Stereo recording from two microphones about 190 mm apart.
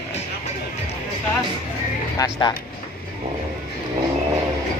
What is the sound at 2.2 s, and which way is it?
Speech, 20° left (ahead or behind).